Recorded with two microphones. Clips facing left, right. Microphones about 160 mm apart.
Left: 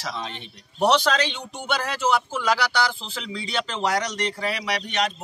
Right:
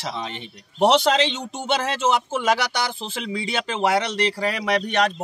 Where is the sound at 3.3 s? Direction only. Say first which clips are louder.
Right 2 dB; 55° right (ahead or behind).